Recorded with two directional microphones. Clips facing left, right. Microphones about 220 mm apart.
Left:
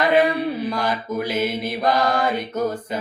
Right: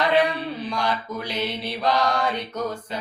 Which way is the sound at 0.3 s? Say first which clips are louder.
Left 6 dB; 10° left (ahead or behind).